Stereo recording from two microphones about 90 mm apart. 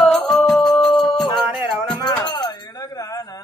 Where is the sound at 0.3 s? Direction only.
Centre (ahead or behind).